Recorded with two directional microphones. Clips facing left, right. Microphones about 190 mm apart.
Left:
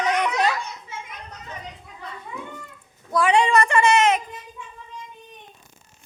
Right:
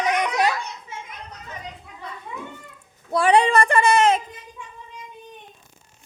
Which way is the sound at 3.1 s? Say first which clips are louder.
Right 2 dB; 35° right (ahead or behind).